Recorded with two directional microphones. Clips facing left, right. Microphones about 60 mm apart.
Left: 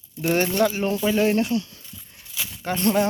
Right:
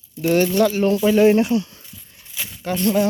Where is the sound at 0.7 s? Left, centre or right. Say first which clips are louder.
Right 6 dB; centre.